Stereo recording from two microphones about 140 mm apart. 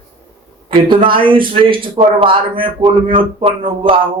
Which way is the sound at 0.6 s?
40° right (ahead or behind).